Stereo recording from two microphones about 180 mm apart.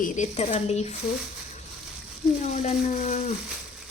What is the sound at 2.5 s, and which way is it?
Speech, 40° left (ahead or behind).